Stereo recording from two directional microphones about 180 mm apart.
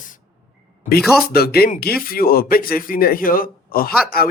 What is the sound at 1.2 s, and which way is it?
A man's voice, 60° left (ahead or behind).